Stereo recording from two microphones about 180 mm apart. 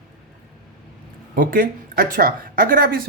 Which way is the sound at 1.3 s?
50° right (ahead or behind).